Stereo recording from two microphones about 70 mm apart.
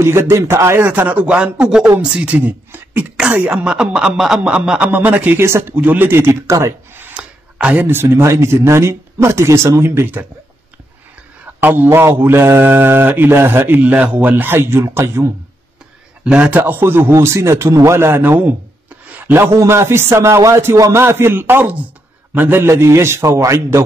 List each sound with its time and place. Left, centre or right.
0.0 s a man's voice: right
0.8 s speech: right
3.4 s speech: centre
4.9 s speech: right
5.4 s a man's voice: right
6.6 s a sound: right
7.2 s a sound: centre
7.8 s a man's voice: right
8.3 s a man's voice: right
11.6 s a man's voice: right
16.3 s speech: centre
16.8 s a man's voice: right
19.5 s a man's voice: right